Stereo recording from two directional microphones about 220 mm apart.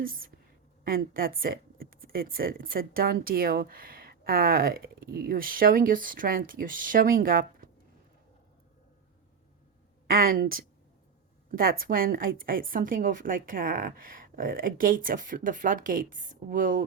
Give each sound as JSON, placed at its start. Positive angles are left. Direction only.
{"t": 0.0, "sound": "speech", "side_deg": -40}
{"t": 10.1, "sound": "speech", "side_deg": -40}